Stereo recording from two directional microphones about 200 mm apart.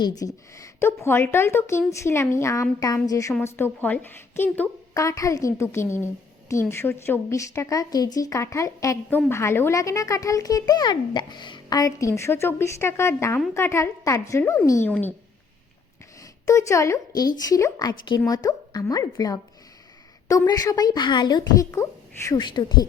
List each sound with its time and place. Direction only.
0.0 s a woman's voice: 20° left (ahead or behind)
16.2 s a woman's voice: 15° left (ahead or behind)